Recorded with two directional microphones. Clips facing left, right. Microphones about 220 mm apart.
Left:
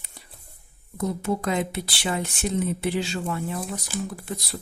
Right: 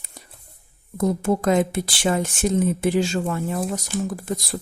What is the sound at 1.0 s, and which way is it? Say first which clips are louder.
Speech: right 5 dB; 45° right (ahead or behind).